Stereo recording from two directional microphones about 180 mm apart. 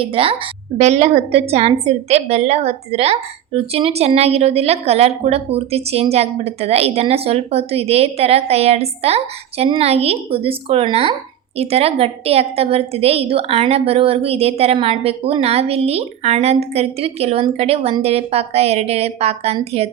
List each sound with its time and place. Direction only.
0.0 s a woman's voice: 30° right (ahead or behind)